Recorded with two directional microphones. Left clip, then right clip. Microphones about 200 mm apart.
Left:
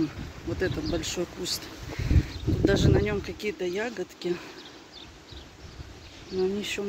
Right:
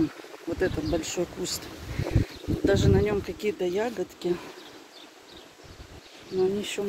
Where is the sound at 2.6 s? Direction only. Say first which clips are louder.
Right 1 dB; 10° right (ahead or behind).